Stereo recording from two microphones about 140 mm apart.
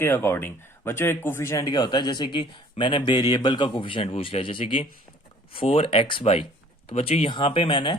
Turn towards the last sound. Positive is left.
turn(degrees=35)  # may be behind; listen again after turning